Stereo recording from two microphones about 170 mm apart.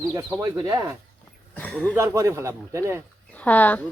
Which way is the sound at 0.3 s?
15° right (ahead or behind).